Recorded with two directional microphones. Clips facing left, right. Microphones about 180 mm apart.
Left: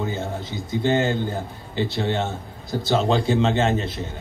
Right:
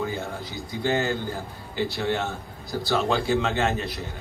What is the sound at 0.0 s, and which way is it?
A man's voice, 20° left (ahead or behind).